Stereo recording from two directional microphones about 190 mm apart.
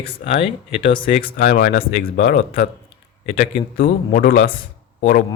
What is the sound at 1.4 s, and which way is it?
Speech, 50° left (ahead or behind).